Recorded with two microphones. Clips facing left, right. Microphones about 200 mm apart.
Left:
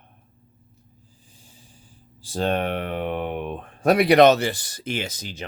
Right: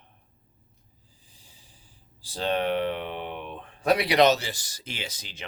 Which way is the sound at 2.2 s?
50° left (ahead or behind).